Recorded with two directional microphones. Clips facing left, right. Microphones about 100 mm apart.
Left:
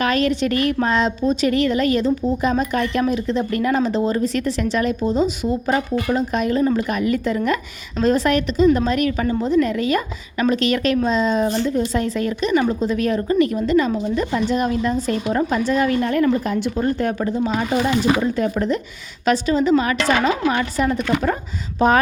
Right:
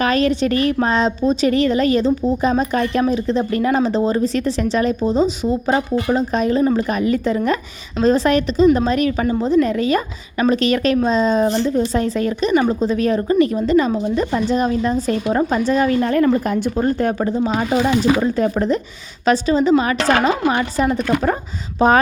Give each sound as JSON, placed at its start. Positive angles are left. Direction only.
{"t": 0.0, "sound": "speech", "side_deg": -35}